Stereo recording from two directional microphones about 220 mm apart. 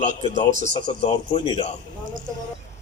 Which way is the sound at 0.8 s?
20° left (ahead or behind).